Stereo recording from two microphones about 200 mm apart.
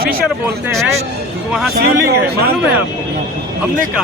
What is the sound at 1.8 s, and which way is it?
Speech, 50° right (ahead or behind).